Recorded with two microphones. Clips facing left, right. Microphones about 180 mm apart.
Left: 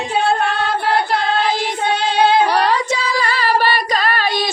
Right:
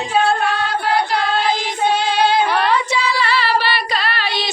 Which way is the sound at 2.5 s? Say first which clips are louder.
Left 1 dB; 40° left (ahead or behind).